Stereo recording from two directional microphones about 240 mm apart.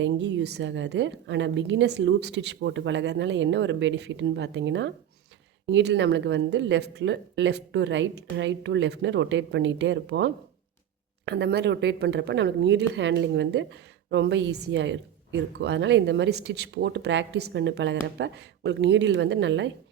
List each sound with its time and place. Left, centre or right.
0.0 s speech: right